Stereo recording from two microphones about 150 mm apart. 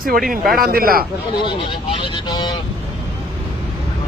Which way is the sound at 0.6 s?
80° right.